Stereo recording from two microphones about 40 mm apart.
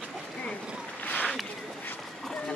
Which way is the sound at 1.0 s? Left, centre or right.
Left.